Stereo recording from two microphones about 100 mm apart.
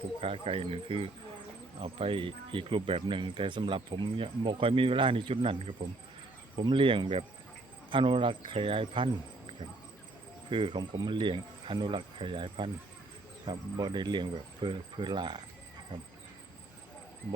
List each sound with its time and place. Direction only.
0.2 s speech: 80° right
6.6 s speech: 60° right (ahead or behind)
10.5 s speech: 55° right (ahead or behind)